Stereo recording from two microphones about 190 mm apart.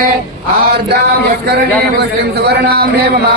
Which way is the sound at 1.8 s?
55° right (ahead or behind).